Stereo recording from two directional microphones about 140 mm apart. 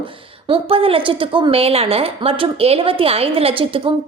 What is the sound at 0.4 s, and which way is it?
A woman's voice, 40° right (ahead or behind).